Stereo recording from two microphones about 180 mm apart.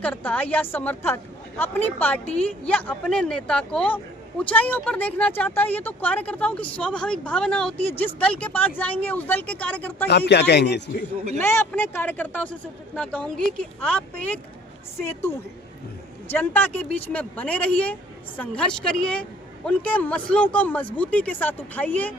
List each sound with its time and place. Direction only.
0.0 s speech: 10° left (ahead or behind)
10.1 s a man's voice: 70° left (ahead or behind)
11.3 s speech: 10° left (ahead or behind)
16.3 s a woman's voice: 10° left (ahead or behind)